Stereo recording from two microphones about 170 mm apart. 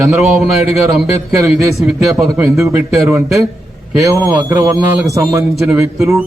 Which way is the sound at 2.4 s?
15° right (ahead or behind).